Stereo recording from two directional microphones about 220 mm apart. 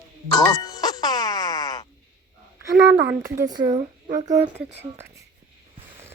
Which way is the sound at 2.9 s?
50° right (ahead or behind).